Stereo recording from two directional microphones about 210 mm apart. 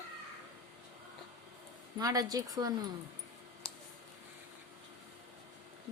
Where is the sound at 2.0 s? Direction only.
15° right (ahead or behind).